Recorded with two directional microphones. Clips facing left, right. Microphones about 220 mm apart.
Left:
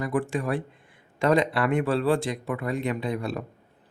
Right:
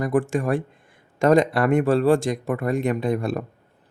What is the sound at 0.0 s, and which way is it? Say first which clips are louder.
Speech: right 5 dB; 45° right (ahead or behind).